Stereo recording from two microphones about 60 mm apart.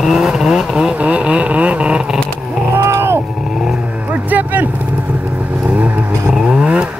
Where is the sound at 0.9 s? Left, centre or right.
Right.